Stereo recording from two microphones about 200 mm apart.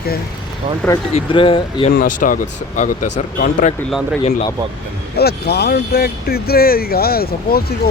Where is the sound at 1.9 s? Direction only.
45° left (ahead or behind).